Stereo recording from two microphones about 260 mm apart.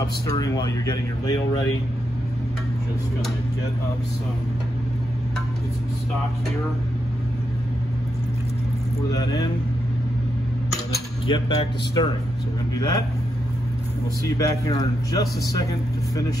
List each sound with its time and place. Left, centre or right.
0.3 s a man's voice: centre
9.1 s a man's voice: centre
11.2 s a man's voice: centre
14.2 s a man's voice: centre